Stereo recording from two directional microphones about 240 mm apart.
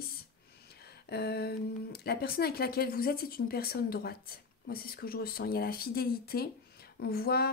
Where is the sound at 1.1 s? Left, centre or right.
Left.